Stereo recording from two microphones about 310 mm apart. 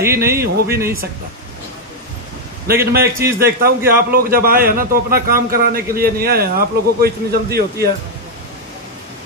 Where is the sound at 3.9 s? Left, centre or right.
Right.